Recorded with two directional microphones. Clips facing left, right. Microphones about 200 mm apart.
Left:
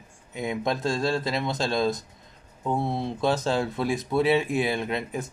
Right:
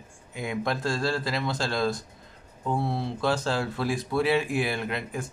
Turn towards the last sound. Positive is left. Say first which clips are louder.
# left 2 dB
turn(degrees=20)  # may be behind; listen again after turning